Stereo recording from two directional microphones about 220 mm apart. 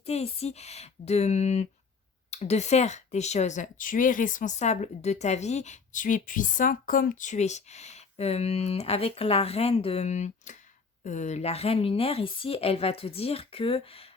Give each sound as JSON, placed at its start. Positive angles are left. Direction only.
{"t": 0.0, "sound": "a woman's voice", "side_deg": 30}